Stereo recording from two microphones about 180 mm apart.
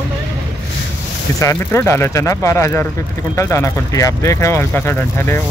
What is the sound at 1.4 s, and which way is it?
Speech, 15° left (ahead or behind).